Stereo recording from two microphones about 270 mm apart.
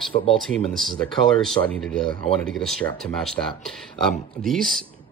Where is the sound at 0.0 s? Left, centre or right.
Centre.